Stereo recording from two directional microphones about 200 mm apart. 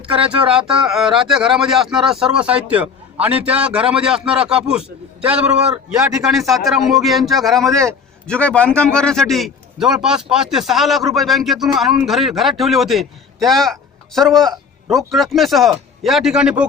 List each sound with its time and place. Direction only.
0.3 s a man's voice: 5° right (ahead or behind)